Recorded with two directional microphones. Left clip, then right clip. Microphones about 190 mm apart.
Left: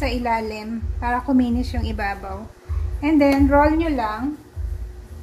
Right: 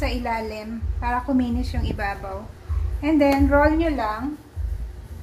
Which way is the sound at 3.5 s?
45° left (ahead or behind).